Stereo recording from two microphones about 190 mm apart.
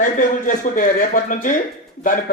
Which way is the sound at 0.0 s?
45° left (ahead or behind).